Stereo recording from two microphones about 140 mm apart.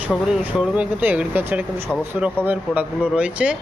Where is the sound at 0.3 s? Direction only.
5° right (ahead or behind).